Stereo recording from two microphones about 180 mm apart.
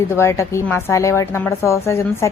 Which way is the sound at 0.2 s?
15° left (ahead or behind).